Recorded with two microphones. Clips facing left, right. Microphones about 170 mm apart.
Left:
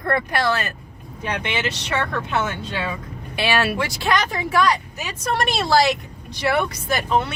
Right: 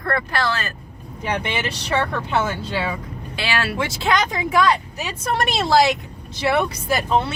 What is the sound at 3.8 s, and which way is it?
Speech, 20° right (ahead or behind).